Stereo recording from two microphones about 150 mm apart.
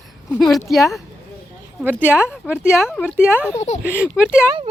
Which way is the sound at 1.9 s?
15° left (ahead or behind).